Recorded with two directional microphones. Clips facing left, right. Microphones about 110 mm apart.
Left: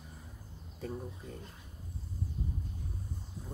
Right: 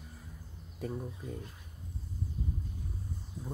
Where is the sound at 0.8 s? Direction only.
5° right (ahead or behind).